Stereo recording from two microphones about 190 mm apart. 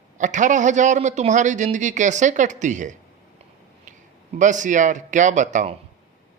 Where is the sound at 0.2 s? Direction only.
40° right (ahead or behind).